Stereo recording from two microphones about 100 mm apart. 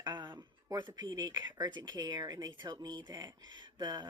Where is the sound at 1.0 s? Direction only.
45° right (ahead or behind).